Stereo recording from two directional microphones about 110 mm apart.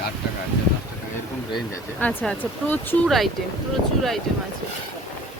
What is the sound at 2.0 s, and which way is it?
Speech, 15° left (ahead or behind).